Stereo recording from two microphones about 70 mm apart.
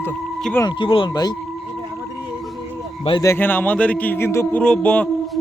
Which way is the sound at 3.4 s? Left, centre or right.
Left.